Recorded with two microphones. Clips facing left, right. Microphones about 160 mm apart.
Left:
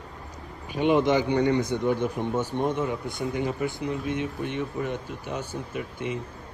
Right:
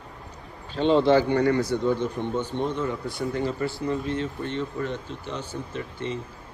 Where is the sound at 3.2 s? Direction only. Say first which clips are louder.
Right 1 dB; 15° left (ahead or behind).